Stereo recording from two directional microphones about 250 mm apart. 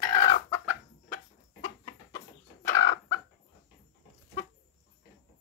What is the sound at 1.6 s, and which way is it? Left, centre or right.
Chicken, centre.